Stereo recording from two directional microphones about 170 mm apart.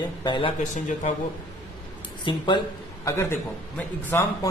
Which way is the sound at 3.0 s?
15° left (ahead or behind).